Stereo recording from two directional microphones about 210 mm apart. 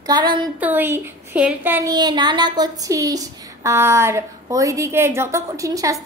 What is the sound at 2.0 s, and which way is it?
Speech, 20° right (ahead or behind).